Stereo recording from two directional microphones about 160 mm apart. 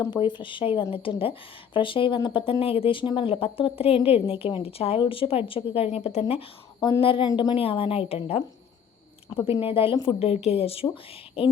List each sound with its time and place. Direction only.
0.1 s speech: 30° left (ahead or behind)